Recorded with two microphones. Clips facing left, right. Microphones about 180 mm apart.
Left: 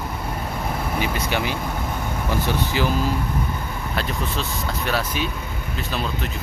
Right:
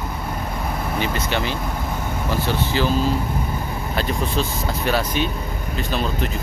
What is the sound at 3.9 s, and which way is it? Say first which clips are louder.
Speech: right 4 dB; centre (ahead or behind).